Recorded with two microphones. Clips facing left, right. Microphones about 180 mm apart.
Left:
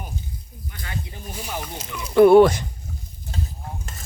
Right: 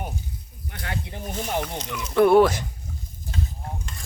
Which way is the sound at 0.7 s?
60° right (ahead or behind).